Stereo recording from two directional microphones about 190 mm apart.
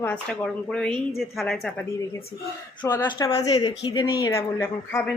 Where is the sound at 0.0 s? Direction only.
5° left (ahead or behind).